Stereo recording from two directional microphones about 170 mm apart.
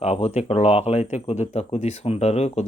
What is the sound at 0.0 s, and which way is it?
Speech, 40° left (ahead or behind).